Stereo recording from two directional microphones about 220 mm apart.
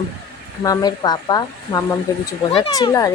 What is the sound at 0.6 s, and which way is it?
A woman's voice, 15° left (ahead or behind).